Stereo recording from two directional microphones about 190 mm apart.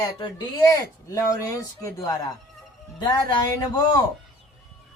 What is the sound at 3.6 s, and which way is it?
Speech, 20° left (ahead or behind).